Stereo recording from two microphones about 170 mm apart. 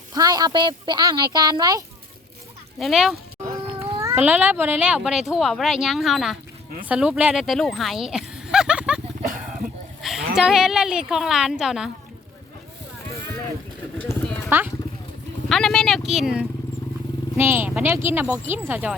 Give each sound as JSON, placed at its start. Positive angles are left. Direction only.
{"t": 0.1, "sound": "speech", "side_deg": -20}
{"t": 2.7, "sound": "speech", "side_deg": 0}
{"t": 3.8, "sound": "speech", "side_deg": -10}
{"t": 10.0, "sound": "speech", "side_deg": 0}
{"t": 14.0, "sound": "clip-clop", "side_deg": 5}
{"t": 15.4, "sound": "speech", "side_deg": 0}